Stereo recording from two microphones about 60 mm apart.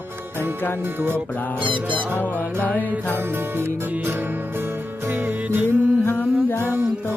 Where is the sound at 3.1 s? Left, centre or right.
Right.